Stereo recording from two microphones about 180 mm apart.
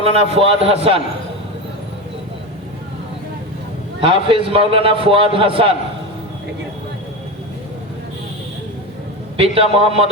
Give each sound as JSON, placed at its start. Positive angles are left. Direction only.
{"t": 0.0, "sound": "a man's voice", "side_deg": -35}
{"t": 4.0, "sound": "a man's voice", "side_deg": -30}
{"t": 9.4, "sound": "a man's voice", "side_deg": -30}